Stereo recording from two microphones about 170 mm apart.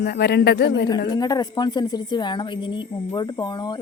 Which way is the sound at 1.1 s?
25° left (ahead or behind).